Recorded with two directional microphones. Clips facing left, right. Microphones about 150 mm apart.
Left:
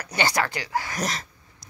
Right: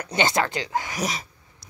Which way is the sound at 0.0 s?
20° right (ahead or behind).